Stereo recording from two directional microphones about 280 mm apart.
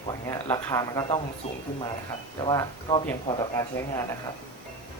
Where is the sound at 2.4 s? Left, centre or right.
Centre.